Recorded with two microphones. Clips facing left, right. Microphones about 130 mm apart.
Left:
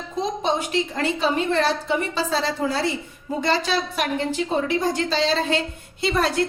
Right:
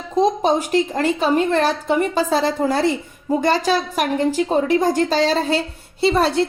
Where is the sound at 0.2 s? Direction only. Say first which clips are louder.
Right 7 dB; 45° right (ahead or behind).